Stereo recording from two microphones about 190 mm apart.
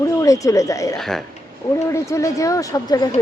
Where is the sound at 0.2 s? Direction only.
15° left (ahead or behind).